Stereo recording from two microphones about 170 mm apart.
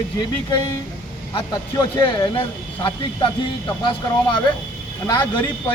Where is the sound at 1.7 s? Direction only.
25° left (ahead or behind).